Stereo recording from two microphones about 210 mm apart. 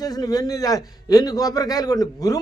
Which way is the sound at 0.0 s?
15° left (ahead or behind).